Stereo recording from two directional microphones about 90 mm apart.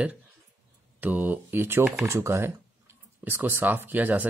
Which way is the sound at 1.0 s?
20° right (ahead or behind).